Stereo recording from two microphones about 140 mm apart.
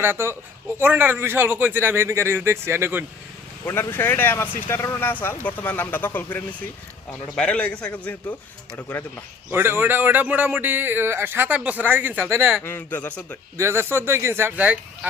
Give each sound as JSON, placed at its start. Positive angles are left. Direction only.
{"t": 0.0, "sound": "speech", "side_deg": -15}
{"t": 3.7, "sound": "speech", "side_deg": 15}
{"t": 9.5, "sound": "speech", "side_deg": -15}
{"t": 12.6, "sound": "speech", "side_deg": 15}
{"t": 13.6, "sound": "speech", "side_deg": -20}